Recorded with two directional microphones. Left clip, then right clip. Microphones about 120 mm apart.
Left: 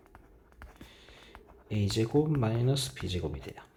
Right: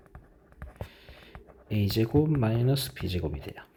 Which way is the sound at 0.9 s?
40° right (ahead or behind).